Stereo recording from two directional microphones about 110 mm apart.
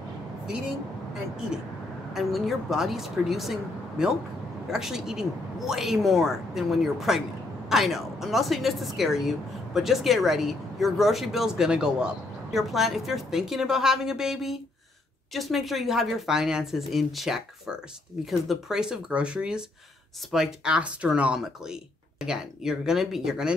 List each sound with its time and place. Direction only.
2.1 s speech: centre (ahead or behind)